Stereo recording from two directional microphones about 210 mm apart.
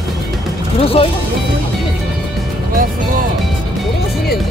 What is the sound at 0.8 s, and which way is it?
Speech, 25° left (ahead or behind).